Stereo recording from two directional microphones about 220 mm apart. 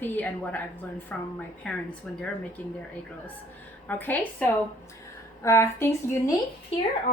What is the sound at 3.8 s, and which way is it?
A woman's voice, 10° left (ahead or behind).